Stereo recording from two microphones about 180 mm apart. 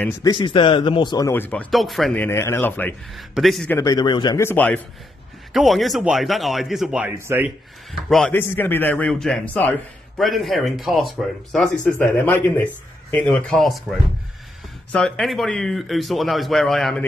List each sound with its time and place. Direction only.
0.2 s speech: 25° left (ahead or behind); by 2.2 s centre (ahead or behind)
2.2 s a man's voice: 15° left (ahead or behind)
3.2 s a man's voice: centre (ahead or behind)
3.7 s a man's voice: 20° left (ahead or behind); by 7.1 s 5° right (ahead or behind)
7.2 s speech: 15° right (ahead or behind)
8.3 s a man's voice: 10° left (ahead or behind)